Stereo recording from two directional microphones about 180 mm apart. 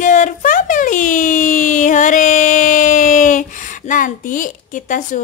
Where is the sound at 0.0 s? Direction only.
45° left (ahead or behind).